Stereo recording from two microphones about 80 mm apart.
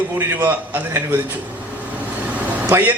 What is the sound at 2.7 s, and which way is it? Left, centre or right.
Speech, right.